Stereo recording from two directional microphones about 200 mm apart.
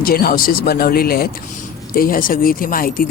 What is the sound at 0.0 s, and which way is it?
Speech, 50° left (ahead or behind).